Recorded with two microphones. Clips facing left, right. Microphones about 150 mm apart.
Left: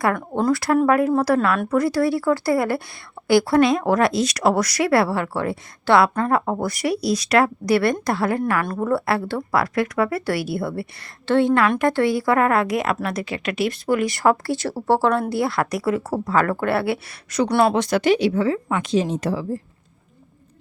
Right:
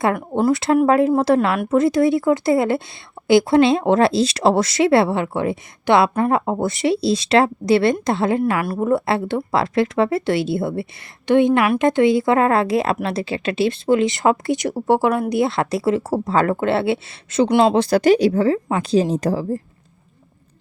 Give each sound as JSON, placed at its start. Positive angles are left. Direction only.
{"t": 0.2, "sound": "a woman's voice", "side_deg": -10}
{"t": 0.5, "sound": "a woman's voice", "side_deg": -20}
{"t": 15.4, "sound": "speech", "side_deg": -25}